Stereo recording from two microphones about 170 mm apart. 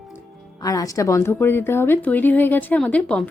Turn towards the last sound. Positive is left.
turn(degrees=5)  # may be behind; listen again after turning